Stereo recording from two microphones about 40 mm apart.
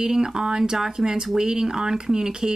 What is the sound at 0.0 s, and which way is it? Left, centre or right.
Speech, centre.